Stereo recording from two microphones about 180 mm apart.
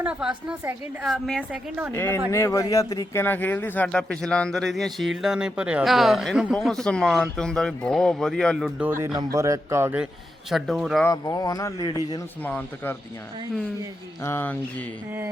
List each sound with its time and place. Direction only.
0.0 s a man's voice: 5° right (ahead or behind)
1.9 s speech: 15° left (ahead or behind)
9.1 s a man's voice: 15° right (ahead or behind); by 11.0 s centre (ahead or behind)
11.0 s speech: 20° left (ahead or behind)
12.4 s speech: 10° left (ahead or behind)
14.3 s speech: 10° left (ahead or behind)